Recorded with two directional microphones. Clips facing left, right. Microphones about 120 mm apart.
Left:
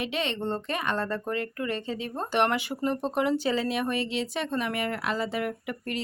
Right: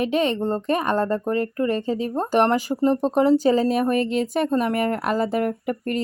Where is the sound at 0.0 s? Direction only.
40° right (ahead or behind).